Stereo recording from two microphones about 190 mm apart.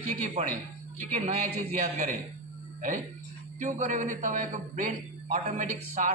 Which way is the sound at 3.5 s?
40° right (ahead or behind).